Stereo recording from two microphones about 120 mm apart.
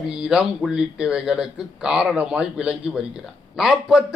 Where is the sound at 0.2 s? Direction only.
5° right (ahead or behind).